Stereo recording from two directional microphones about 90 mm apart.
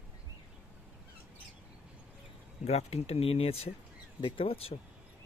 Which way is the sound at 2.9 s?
90° left.